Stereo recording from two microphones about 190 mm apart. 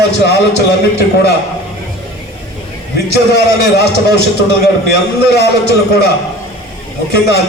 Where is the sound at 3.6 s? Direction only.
60° left (ahead or behind).